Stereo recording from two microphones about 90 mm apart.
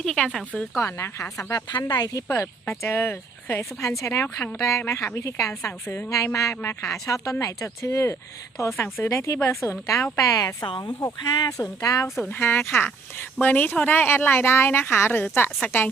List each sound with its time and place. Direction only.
0.0 s speech: 5° left (ahead or behind)
0.8 s speech: 35° left (ahead or behind)
1.7 s speech: 50° left (ahead or behind)
2.6 s speech: 25° left (ahead or behind)
4.4 s speech: 15° left (ahead or behind)
4.9 s speech: 30° left (ahead or behind)
10.2 s speech: 40° left (ahead or behind)
12.3 s speech: 25° left (ahead or behind)